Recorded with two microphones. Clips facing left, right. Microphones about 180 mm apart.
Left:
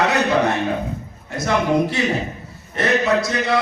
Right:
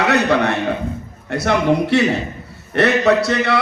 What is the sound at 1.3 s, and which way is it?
A man's voice, 65° right (ahead or behind).